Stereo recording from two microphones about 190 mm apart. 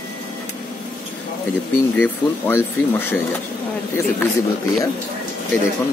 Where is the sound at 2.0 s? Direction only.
10° left (ahead or behind).